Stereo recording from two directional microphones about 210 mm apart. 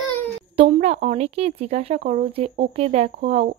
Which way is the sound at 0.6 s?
30° right (ahead or behind).